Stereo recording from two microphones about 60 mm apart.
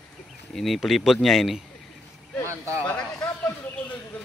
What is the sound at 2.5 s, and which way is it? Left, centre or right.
Speech, right.